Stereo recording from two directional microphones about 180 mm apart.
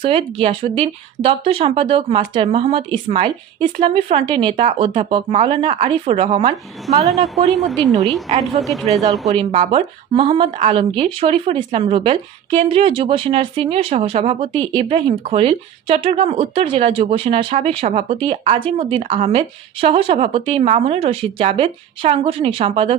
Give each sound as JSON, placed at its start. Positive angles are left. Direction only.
{"t": 0.0, "sound": "speech", "side_deg": -30}
{"t": 7.3, "sound": "speech", "side_deg": 0}
{"t": 9.4, "sound": "speech", "side_deg": -25}